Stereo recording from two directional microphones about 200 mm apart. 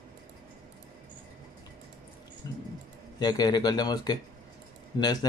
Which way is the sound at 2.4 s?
20° left (ahead or behind).